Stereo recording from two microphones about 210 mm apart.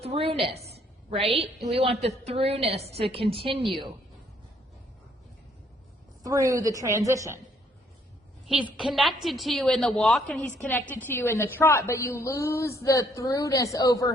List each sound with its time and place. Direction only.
0.0 s a woman's voice: 30° right (ahead or behind)
0.4 s a sound: 30° right (ahead or behind)
1.6 s a woman's voice: 25° right (ahead or behind)
3.6 s a woman's voice: centre (ahead or behind)
6.2 s a woman's voice: 15° right (ahead or behind)
8.4 s a woman's voice: 5° right (ahead or behind); by 14.1 s 15° left (ahead or behind)